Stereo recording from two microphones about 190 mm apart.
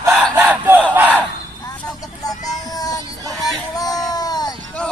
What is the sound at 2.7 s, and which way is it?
Child singing, 20° left (ahead or behind).